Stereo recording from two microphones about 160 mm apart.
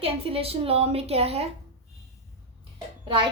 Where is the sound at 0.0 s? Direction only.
35° right (ahead or behind).